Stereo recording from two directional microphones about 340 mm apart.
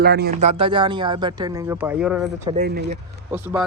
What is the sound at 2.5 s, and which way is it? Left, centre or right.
Speech, right.